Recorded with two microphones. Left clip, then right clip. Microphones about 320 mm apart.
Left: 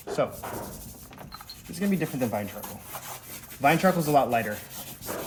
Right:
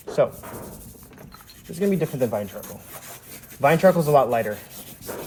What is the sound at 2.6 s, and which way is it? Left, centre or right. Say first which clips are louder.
Wood: left 1 dB; centre.